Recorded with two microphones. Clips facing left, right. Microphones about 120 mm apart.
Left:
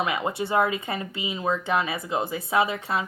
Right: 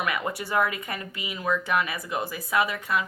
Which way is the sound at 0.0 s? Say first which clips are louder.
Left 3 dB; 25° left (ahead or behind).